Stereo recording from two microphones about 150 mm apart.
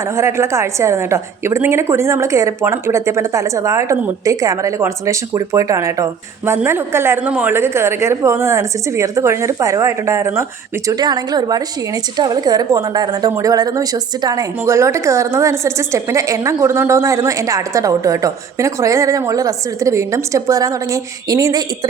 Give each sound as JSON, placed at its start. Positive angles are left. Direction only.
{"t": 0.2, "sound": "a woman's voice", "side_deg": -20}